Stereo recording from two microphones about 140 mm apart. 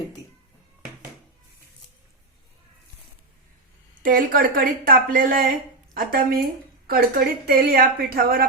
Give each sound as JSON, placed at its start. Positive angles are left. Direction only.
{"t": 4.0, "sound": "speech", "side_deg": -85}